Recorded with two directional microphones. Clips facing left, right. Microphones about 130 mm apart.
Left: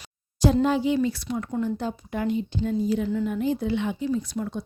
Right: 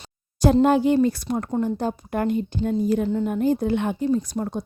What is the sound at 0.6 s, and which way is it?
Speech, 55° right (ahead or behind).